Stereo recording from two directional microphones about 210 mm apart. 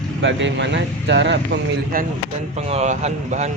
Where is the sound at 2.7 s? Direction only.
30° right (ahead or behind).